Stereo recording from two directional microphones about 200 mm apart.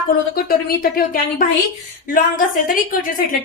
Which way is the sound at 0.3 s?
50° left (ahead or behind).